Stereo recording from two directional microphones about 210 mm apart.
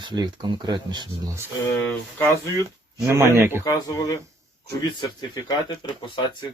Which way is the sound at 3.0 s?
15° right (ahead or behind).